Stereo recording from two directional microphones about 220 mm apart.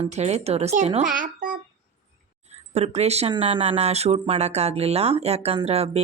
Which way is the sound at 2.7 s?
30° right (ahead or behind).